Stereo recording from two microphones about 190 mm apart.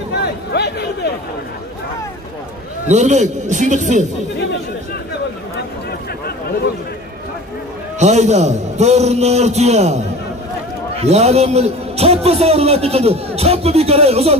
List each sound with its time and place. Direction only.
0.1 s a sound: 60° left (ahead or behind)
2.9 s a man's voice: 35° right (ahead or behind)
8.0 s a man's voice: 40° right (ahead or behind)